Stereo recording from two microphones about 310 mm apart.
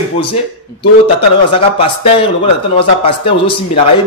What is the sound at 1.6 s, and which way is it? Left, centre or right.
A man's voice, centre.